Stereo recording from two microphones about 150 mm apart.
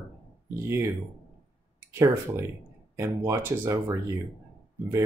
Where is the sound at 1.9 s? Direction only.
15° right (ahead or behind).